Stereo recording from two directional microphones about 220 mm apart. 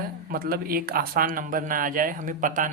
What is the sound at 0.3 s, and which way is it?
Speech, 45° right (ahead or behind).